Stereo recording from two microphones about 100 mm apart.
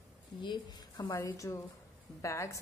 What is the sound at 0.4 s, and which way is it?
Speech, 45° left (ahead or behind).